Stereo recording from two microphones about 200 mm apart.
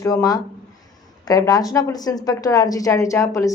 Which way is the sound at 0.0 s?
15° left (ahead or behind).